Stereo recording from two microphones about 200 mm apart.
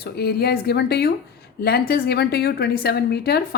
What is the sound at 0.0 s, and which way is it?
A woman's voice, 50° left (ahead or behind).